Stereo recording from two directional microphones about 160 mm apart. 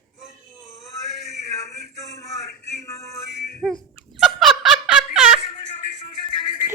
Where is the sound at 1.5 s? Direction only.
20° left (ahead or behind).